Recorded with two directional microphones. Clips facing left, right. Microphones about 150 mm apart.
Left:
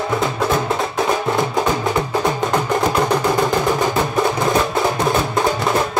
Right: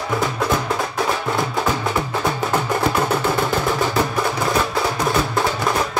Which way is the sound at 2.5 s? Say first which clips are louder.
Left 2 dB; 15° left (ahead or behind).